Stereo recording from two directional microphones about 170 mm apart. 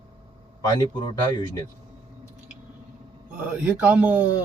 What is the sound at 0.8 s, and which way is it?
Speech, 25° left (ahead or behind).